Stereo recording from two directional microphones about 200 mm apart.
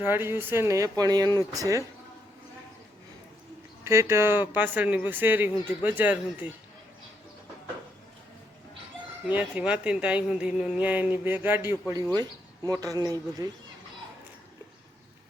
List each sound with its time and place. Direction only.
0.0 s speech: 10° right (ahead or behind)
3.8 s speech: 15° right (ahead or behind)
9.2 s speech: 5° right (ahead or behind)